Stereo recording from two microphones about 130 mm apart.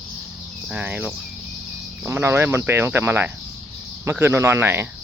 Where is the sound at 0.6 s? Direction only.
10° right (ahead or behind).